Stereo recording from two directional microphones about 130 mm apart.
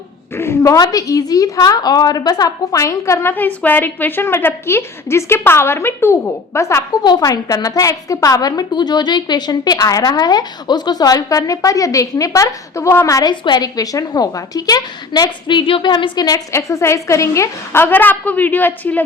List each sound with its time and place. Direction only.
0.3 s a woman's voice: 20° left (ahead or behind)
7.0 s a woman's voice: 30° left (ahead or behind)
13.3 s a woman's voice: 35° left (ahead or behind); by 19.0 s 15° left (ahead or behind)